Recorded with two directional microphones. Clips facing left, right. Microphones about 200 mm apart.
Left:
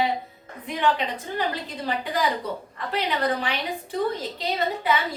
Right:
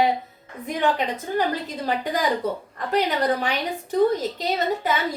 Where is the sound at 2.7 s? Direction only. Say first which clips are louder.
Right 4 dB; 45° right (ahead or behind).